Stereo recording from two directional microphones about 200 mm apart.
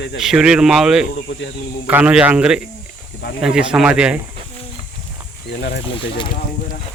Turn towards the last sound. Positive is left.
turn(degrees=25)  # may be behind; listen again after turning